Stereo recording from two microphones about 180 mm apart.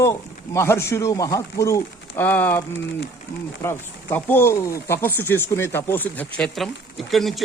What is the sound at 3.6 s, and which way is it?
Speech, 10° left (ahead or behind).